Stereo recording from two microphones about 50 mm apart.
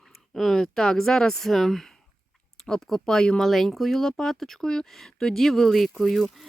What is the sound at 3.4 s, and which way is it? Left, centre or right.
Speech, centre.